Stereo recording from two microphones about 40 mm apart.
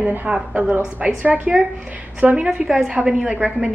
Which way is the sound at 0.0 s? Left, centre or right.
Right.